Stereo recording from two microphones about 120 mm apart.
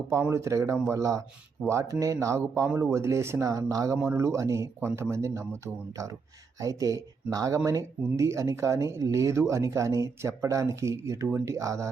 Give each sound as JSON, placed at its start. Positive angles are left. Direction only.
{"t": 0.1, "sound": "speech", "side_deg": -20}